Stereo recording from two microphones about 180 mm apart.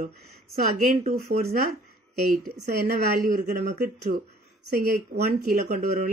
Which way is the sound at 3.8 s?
65° right (ahead or behind).